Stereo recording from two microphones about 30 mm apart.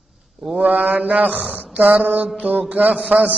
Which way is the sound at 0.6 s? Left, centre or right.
Right.